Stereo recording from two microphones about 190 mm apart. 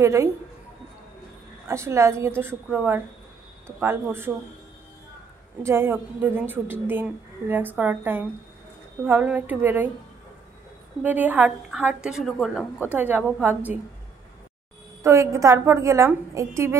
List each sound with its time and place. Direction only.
0.0 s a woman's voice: 15° right (ahead or behind)
1.7 s a woman's voice: 15° right (ahead or behind)
5.6 s a woman's voice: 15° right (ahead or behind)
11.0 s a woman's voice: 10° right (ahead or behind)
15.0 s a woman's voice: 15° right (ahead or behind)